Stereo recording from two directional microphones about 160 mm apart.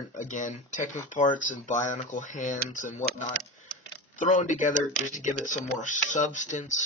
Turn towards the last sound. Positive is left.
turn(degrees=50)  # may be behind; listen again after turning